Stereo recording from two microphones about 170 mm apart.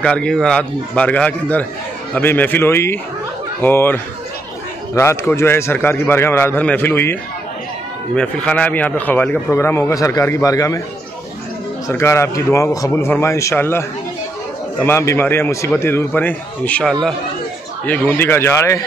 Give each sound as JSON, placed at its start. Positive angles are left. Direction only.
{"t": 0.0, "sound": "speech", "side_deg": 5}
{"t": 11.9, "sound": "speech", "side_deg": 15}